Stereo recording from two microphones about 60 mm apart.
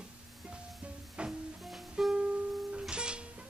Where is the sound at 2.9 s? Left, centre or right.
Centre.